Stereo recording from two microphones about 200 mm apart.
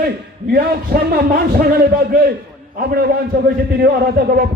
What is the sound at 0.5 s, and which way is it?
A man's voice, 50° right (ahead or behind).